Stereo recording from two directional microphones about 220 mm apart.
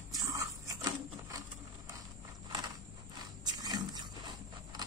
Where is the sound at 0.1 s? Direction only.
15° right (ahead or behind).